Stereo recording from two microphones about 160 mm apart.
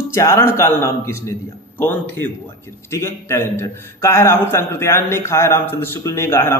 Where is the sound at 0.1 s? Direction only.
15° left (ahead or behind).